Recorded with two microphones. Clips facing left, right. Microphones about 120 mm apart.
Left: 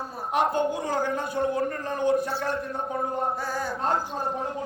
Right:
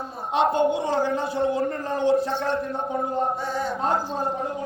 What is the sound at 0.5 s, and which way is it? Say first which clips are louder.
A man's voice: right 4 dB; 25° right (ahead or behind).